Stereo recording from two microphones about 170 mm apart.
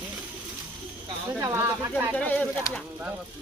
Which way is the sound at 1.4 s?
15° right (ahead or behind).